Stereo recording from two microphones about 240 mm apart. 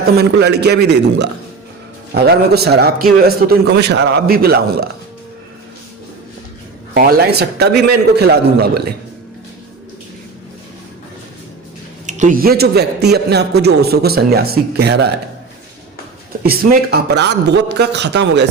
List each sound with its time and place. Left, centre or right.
0.0 s a man's voice: right
6.9 s a man's voice: right
12.0 s a man's voice: right
16.4 s a man's voice: right